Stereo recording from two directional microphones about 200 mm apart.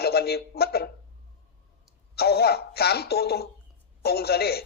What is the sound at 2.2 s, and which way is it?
Speech, 50° left (ahead or behind).